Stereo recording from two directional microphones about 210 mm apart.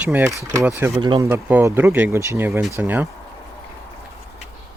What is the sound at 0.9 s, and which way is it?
Speech, 20° right (ahead or behind).